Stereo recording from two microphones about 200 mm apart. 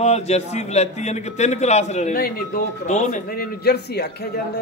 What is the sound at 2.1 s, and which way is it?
A man's voice, 50° left (ahead or behind).